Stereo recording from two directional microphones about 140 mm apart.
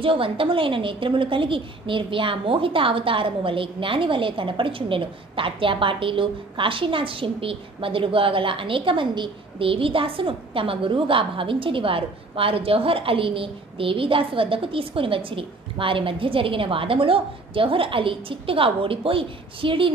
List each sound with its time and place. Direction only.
0.0 s a woman's voice: 40° right (ahead or behind)